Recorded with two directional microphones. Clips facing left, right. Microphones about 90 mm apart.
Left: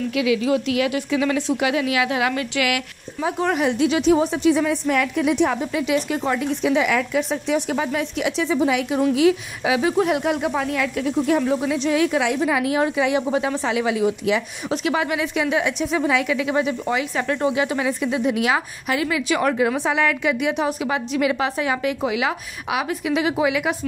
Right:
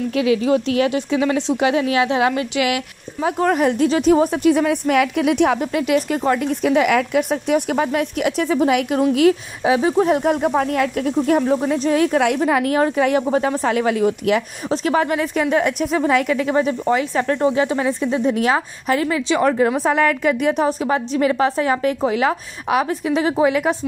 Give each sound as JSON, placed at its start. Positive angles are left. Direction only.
{"t": 0.1, "sound": "a woman's voice", "side_deg": -40}
{"t": 3.2, "sound": "speech", "side_deg": -45}
{"t": 9.6, "sound": "speech", "side_deg": -30}
{"t": 14.7, "sound": "a woman's voice", "side_deg": -40}